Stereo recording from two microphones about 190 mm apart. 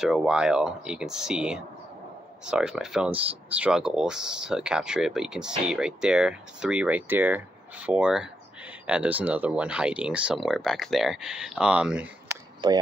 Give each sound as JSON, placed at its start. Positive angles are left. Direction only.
{"t": 0.0, "sound": "speech", "side_deg": -5}
{"t": 12.6, "sound": "speech", "side_deg": -25}